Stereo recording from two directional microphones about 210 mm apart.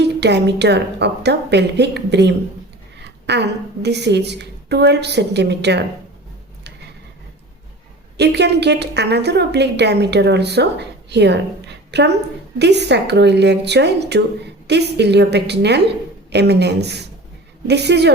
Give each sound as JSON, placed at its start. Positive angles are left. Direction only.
{"t": 0.0, "sound": "a woman's voice", "side_deg": -55}
{"t": 3.0, "sound": "a sound", "side_deg": -55}
{"t": 3.8, "sound": "a woman's voice", "side_deg": -55}
{"t": 8.2, "sound": "a woman's voice", "side_deg": -55}